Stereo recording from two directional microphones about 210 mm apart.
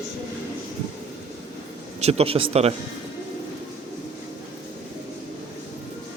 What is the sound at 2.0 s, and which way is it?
Speech, 30° right (ahead or behind).